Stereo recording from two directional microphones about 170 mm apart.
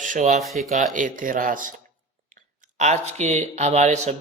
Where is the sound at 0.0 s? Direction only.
45° right (ahead or behind).